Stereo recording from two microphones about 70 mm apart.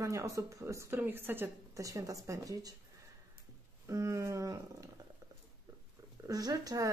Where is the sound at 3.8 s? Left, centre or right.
Right.